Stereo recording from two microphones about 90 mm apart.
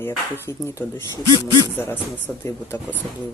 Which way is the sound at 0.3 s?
30° left (ahead or behind).